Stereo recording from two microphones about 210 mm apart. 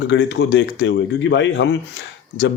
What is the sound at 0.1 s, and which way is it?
Speech, 60° left (ahead or behind).